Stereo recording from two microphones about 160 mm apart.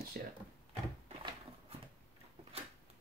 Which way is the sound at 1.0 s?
35° right (ahead or behind).